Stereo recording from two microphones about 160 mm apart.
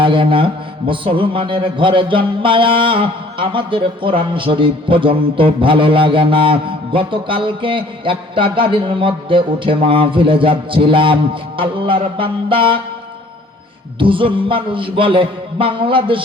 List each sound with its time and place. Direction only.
0.0 s a man's voice: 30° right (ahead or behind)
14.0 s a man's voice: 35° right (ahead or behind)